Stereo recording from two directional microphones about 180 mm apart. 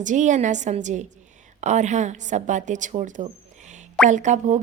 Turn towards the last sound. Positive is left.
turn(degrees=-40)  # may be behind; listen again after turning